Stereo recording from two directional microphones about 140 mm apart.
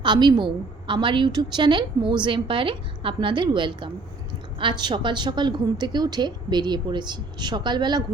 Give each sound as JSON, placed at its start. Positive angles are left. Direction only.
{"t": 0.0, "sound": "a woman's voice", "side_deg": -35}